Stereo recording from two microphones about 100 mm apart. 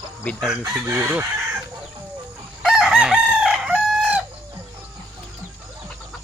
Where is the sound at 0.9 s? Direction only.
20° right (ahead or behind).